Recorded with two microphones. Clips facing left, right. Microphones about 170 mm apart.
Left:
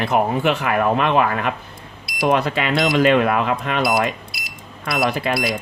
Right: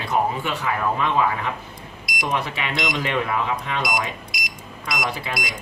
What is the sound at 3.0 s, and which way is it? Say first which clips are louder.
Speech: left 10 dB; 85° left.